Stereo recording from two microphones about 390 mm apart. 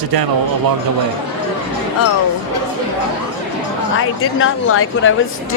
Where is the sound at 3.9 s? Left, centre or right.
Left.